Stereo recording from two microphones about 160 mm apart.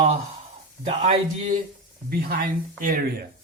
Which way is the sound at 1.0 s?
55° right (ahead or behind).